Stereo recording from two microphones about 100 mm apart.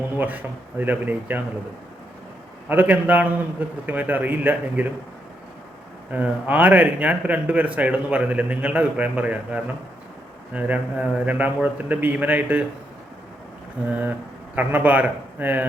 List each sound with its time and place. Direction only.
0.2 s a man's voice: 15° right (ahead or behind)
2.6 s a man's voice: 15° right (ahead or behind)
6.1 s a man's voice: 15° right (ahead or behind)
13.9 s speech: 15° right (ahead or behind)